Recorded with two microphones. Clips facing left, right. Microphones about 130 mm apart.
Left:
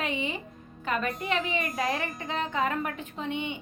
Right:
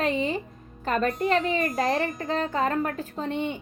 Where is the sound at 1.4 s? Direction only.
Centre (ahead or behind).